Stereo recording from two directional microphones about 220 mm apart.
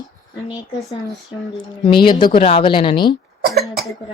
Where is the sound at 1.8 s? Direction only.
20° left (ahead or behind).